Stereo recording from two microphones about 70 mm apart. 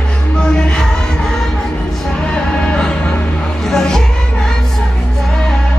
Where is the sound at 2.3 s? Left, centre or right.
Centre.